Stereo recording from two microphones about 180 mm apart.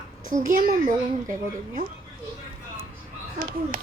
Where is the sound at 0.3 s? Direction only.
45° right (ahead or behind).